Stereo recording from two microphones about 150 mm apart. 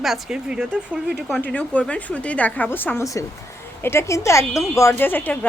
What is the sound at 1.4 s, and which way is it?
A woman's voice, 10° left (ahead or behind).